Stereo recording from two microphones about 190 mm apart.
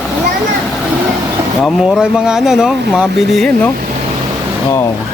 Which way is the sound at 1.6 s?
Centre (ahead or behind).